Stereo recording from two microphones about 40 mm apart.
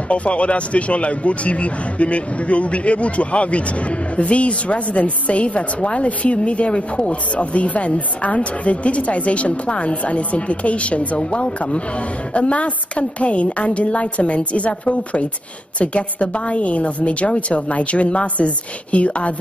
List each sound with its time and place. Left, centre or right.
0.1 s a man's voice: left